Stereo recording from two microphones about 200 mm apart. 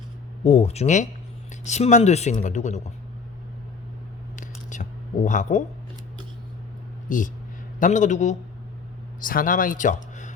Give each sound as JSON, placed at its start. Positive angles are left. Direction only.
{"t": 0.4, "sound": "speech", "side_deg": 30}
{"t": 4.4, "sound": "a sound", "side_deg": 40}
{"t": 7.1, "sound": "speech", "side_deg": 40}